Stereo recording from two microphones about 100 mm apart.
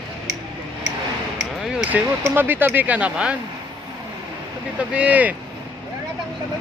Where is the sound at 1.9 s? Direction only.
15° right (ahead or behind).